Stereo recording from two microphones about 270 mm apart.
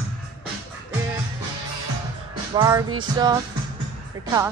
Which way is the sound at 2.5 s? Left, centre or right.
Centre.